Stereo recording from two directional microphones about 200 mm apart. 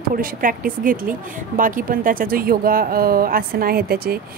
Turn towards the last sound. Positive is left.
turn(degrees=-50)  # may be behind; listen again after turning